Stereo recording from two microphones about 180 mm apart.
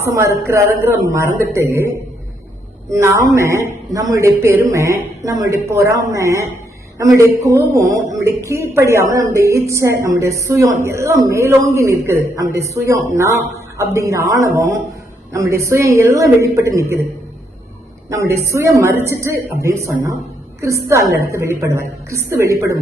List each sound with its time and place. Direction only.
0.0 s speech: 15° right (ahead or behind)
2.9 s speech: 15° right (ahead or behind)
18.1 s speech: 15° right (ahead or behind)